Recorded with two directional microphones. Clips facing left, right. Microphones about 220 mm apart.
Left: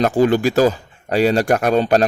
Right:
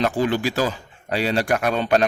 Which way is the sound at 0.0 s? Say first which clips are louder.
Left 6 dB; 45° left (ahead or behind).